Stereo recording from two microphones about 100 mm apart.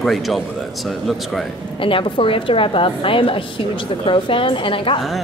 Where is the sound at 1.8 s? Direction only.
60° left (ahead or behind).